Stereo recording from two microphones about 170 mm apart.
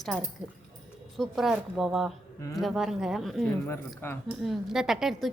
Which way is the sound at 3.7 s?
10° left (ahead or behind).